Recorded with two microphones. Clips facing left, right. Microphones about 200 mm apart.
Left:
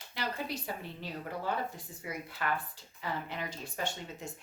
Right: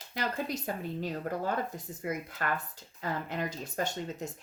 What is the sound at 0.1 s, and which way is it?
Speech, 45° right (ahead or behind).